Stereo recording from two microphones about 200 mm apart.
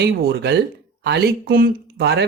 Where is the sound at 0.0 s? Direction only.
55° right (ahead or behind).